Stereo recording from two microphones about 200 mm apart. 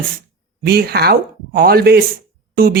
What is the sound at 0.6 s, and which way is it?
Speech, 50° right (ahead or behind).